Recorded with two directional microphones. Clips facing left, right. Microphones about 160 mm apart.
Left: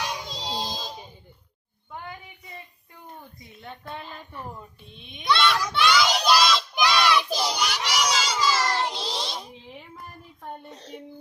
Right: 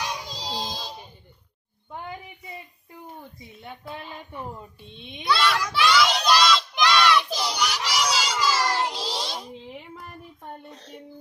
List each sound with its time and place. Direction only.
0.3 s music: centre (ahead or behind)
3.6 s speech: 5° right (ahead or behind)
4.9 s child singing: 30° right (ahead or behind)
5.2 s a child's voice: 5° right (ahead or behind)
5.7 s crowd: centre (ahead or behind)
7.7 s a sound: 5° right (ahead or behind)